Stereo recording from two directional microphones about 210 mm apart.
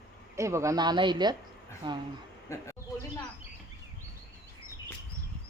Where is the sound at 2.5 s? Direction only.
15° left (ahead or behind).